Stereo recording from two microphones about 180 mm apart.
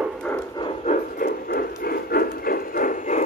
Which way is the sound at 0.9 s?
55° left (ahead or behind).